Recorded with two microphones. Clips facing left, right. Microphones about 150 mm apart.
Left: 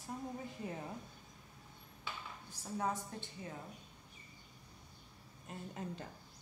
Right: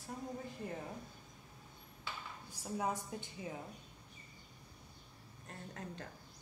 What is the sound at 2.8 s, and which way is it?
Speech, 10° right (ahead or behind).